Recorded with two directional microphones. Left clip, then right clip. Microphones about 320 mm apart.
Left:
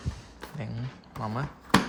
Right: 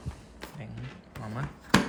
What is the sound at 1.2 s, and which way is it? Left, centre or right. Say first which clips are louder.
Speech: left 6 dB; centre.